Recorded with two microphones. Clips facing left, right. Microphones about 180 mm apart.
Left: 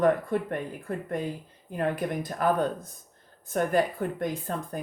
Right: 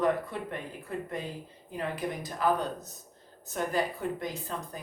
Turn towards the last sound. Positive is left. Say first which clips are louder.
# left 5 dB
turn(degrees=55)  # may be behind; listen again after turning